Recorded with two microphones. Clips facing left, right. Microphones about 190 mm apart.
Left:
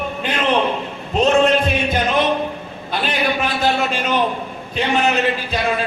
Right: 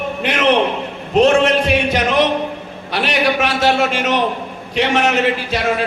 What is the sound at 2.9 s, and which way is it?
A man's voice, 80° right.